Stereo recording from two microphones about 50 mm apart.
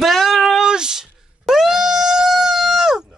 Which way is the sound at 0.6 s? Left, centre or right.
Centre.